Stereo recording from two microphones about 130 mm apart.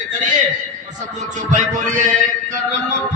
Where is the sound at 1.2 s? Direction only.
70° right (ahead or behind).